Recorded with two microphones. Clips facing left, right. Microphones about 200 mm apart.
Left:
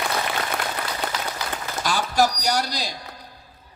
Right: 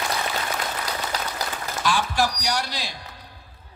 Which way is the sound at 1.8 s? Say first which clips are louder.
Left 2 dB; 40° left (ahead or behind).